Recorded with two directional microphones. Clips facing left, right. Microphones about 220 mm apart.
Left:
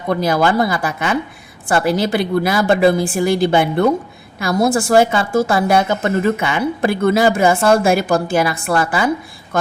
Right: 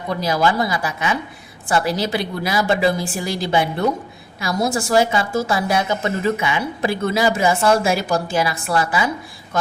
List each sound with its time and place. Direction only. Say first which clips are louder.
0.1 s a woman's voice: left 4 dB; 55° left (ahead or behind)